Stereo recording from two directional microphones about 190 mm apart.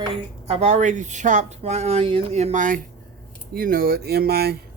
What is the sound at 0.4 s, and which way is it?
Speech, 35° right (ahead or behind).